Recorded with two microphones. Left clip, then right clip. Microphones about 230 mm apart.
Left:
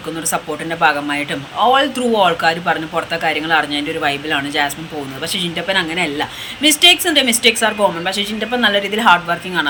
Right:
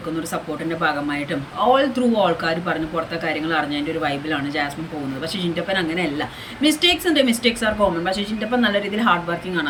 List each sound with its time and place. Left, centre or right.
0.7 s a woman's voice: centre